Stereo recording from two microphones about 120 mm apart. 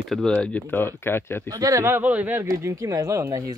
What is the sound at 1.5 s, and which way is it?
Speech, 30° right (ahead or behind).